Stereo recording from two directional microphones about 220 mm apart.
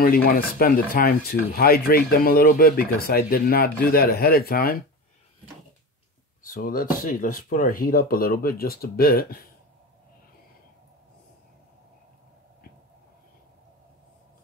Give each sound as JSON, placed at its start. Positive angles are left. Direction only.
{"t": 0.0, "sound": "speech", "side_deg": 40}
{"t": 6.4, "sound": "speech", "side_deg": 40}